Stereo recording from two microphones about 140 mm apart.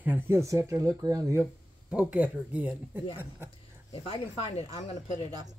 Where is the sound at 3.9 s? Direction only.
40° left (ahead or behind).